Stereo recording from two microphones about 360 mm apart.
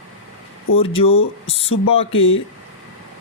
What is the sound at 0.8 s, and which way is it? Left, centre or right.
Speech, centre.